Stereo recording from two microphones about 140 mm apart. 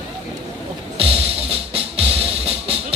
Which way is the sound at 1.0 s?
45° right (ahead or behind).